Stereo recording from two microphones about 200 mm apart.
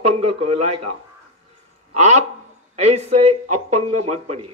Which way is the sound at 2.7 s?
35° right (ahead or behind).